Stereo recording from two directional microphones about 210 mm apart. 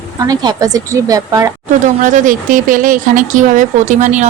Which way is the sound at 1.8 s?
40° right (ahead or behind).